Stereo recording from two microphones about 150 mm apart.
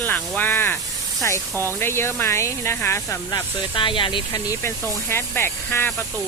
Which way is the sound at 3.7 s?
35° left (ahead or behind).